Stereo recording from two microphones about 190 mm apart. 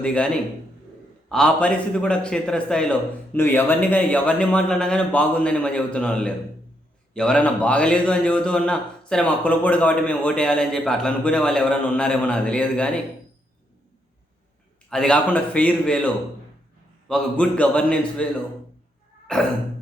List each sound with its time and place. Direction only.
0.0 s a man's voice: 5° left (ahead or behind)
1.3 s a man's voice: 5° left (ahead or behind)
14.8 s a man's voice: 5° left (ahead or behind)
17.1 s a man's voice: 5° left (ahead or behind)
19.3 s a man's voice: 5° left (ahead or behind)